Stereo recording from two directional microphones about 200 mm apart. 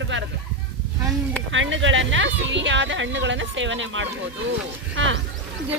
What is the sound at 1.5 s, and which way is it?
Speech, 70° right (ahead or behind).